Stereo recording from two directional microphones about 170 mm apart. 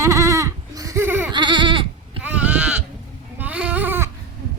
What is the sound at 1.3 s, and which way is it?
Goat, 25° right (ahead or behind).